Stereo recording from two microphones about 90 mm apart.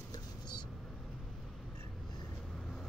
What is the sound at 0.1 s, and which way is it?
Vehicle, 55° left (ahead or behind).